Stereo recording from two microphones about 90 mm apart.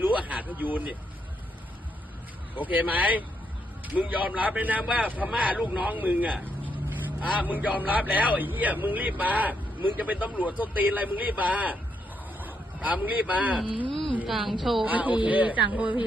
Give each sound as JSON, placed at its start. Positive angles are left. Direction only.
{"t": 0.0, "sound": "speech", "side_deg": -15}
{"t": 2.6, "sound": "a man's voice", "side_deg": -20}
{"t": 14.6, "sound": "speech", "side_deg": 0}
{"t": 14.8, "sound": "a man's voice", "side_deg": -15}